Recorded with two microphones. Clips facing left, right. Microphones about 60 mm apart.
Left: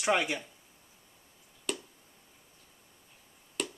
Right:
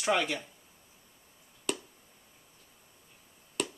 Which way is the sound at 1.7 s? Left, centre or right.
Centre.